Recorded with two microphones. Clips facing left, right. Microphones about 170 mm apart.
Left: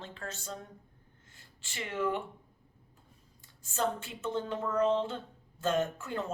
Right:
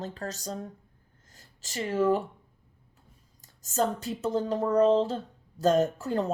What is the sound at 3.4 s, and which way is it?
Speech, 40° right (ahead or behind).